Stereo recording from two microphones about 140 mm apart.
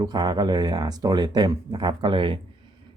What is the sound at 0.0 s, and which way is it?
Speech, 30° right (ahead or behind).